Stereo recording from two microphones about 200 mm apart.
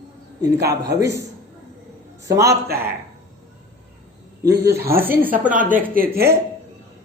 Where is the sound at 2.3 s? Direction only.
15° right (ahead or behind).